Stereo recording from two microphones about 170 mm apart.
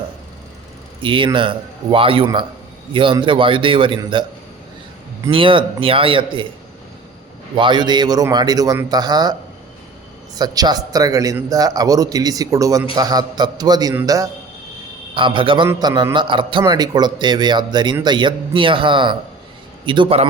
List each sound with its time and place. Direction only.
1.0 s a man's voice: 30° right (ahead or behind)
5.3 s speech: 30° right (ahead or behind)
7.5 s a man's voice: 25° right (ahead or behind)
10.3 s a man's voice: 20° right (ahead or behind)